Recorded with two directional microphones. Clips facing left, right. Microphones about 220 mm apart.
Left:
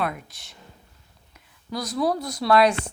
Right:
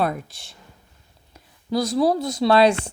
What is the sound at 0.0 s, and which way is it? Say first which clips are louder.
Speech: right 5 dB; 30° right (ahead or behind).